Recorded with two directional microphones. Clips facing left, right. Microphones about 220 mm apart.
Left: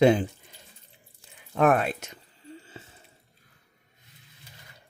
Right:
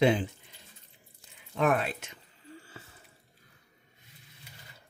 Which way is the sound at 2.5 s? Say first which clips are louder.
Left 4 dB; 20° left (ahead or behind).